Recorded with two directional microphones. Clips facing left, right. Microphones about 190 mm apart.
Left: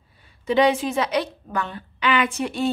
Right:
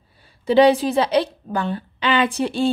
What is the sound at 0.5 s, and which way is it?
A woman's voice, 35° right (ahead or behind).